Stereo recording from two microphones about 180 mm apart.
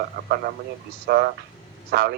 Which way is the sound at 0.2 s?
55° right (ahead or behind).